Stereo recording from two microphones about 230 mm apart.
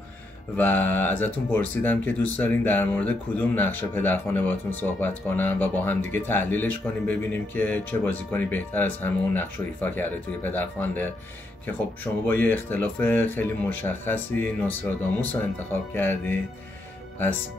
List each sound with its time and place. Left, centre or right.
0.6 s speech: centre